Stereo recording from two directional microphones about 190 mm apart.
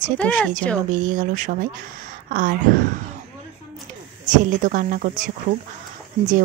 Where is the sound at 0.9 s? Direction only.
40° right (ahead or behind).